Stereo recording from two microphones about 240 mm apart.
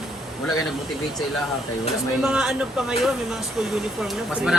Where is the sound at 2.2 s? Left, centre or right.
Centre.